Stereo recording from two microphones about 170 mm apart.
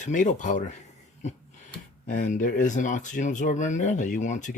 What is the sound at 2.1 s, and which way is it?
Speech, 50° left (ahead or behind).